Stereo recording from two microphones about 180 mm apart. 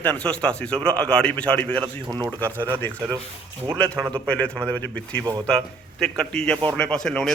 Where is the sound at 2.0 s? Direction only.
20° right (ahead or behind).